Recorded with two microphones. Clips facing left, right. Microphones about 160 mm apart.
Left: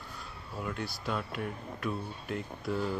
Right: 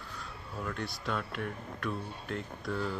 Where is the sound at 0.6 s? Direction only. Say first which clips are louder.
Left 1 dB; 5° left (ahead or behind).